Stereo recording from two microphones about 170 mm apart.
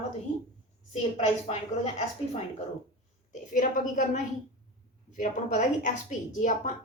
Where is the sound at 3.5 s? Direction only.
50° left (ahead or behind).